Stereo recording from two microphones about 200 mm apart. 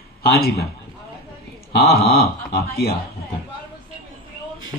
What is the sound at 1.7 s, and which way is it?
A man's voice, 50° left (ahead or behind).